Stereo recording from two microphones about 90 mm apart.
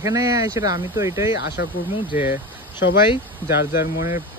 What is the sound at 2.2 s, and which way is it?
Speech, 25° right (ahead or behind).